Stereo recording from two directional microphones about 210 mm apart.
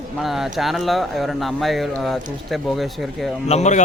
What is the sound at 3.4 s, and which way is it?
Speech, 30° left (ahead or behind).